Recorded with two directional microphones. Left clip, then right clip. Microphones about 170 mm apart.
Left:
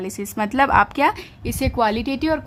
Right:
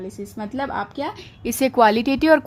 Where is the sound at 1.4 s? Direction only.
20° right (ahead or behind).